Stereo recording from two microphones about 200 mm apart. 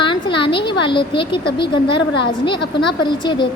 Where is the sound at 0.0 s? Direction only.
25° left (ahead or behind).